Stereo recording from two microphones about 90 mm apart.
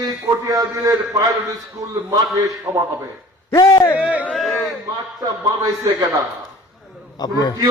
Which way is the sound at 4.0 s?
15° right (ahead or behind).